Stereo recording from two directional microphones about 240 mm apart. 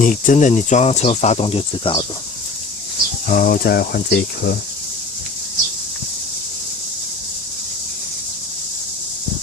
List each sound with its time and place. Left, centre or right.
0.0 s speech: left
3.2 s speech: left